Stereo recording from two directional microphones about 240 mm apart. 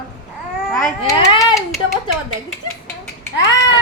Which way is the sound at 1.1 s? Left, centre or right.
Centre.